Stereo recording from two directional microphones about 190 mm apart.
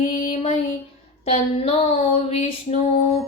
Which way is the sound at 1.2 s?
30° left (ahead or behind).